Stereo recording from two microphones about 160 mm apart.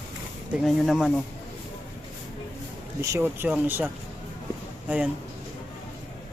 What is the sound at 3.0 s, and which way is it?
Speech, 15° right (ahead or behind).